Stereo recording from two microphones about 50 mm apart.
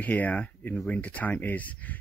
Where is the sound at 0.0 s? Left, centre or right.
Left.